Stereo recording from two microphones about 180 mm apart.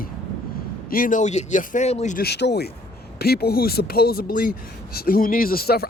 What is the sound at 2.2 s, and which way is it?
Speech, 70° left (ahead or behind).